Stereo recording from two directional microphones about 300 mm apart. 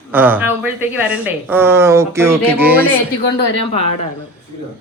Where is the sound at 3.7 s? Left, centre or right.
Centre.